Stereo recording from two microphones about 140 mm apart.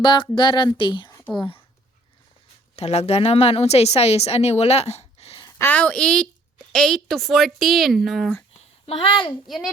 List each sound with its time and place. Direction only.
0.0 s speech: 35° left (ahead or behind)
2.7 s a woman's voice: 50° left (ahead or behind)
5.5 s a woman's voice: 10° left (ahead or behind)
8.9 s speech: 40° left (ahead or behind)